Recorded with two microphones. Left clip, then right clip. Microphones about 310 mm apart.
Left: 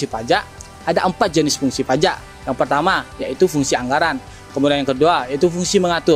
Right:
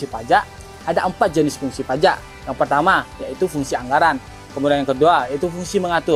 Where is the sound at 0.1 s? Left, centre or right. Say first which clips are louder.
Right 5 dB; left.